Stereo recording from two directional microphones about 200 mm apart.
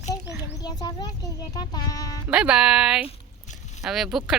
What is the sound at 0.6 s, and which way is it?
Speech, 20° left (ahead or behind).